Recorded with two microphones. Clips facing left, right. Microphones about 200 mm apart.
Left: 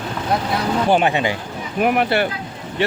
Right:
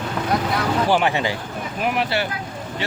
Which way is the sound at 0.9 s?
20° left (ahead or behind).